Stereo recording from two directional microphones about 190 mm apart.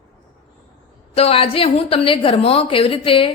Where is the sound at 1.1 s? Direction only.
30° left (ahead or behind).